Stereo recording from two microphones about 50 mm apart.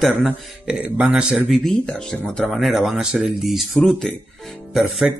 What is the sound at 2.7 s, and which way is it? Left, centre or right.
Speech, centre.